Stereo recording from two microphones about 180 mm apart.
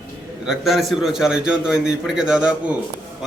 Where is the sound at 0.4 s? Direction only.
Centre (ahead or behind).